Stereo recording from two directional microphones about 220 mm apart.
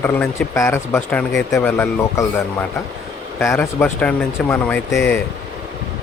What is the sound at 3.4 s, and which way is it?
Speech, 10° left (ahead or behind).